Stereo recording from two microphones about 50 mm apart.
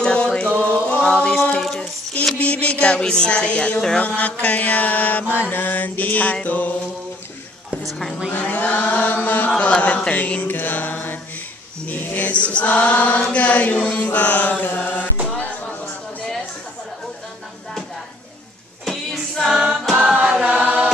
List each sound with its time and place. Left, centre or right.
0.0 s a sound: centre
2.3 s single-lens reflex camera: left
4.0 s mantra: left
8.3 s mantra: left
9.6 s single-lens reflex camera: left
10.5 s mantra: left
12.3 s single-lens reflex camera: left
14.8 s music: left
15.2 s a sound: left
18.9 s music: centre
20.0 s chant: right